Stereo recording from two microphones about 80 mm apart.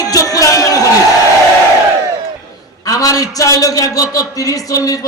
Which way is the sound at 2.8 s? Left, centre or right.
Left.